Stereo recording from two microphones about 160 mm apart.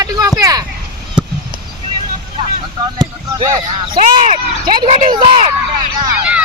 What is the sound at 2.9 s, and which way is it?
Speech, 30° right (ahead or behind).